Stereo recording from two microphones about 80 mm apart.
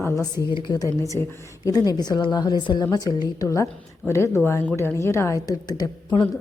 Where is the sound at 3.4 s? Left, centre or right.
Left.